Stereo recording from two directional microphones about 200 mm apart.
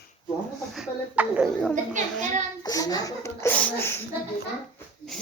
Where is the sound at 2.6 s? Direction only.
20° left (ahead or behind).